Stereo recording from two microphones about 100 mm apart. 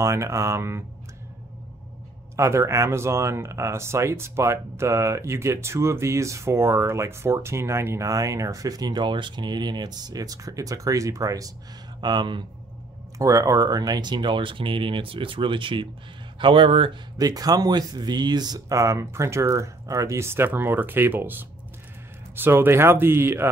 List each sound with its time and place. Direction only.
0.0 s speech: 30° right (ahead or behind)
2.3 s speech: 30° right (ahead or behind)
12.0 s speech: 50° right (ahead or behind)
13.2 s speech: 35° right (ahead or behind); by 16.9 s 60° right (ahead or behind)
17.2 s speech: 40° right (ahead or behind); by 23.5 s 25° right (ahead or behind)